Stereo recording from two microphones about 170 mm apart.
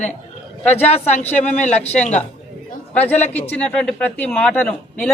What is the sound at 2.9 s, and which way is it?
A man's voice, 10° left (ahead or behind).